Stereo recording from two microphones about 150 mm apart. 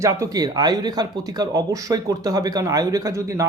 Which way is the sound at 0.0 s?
20° right (ahead or behind).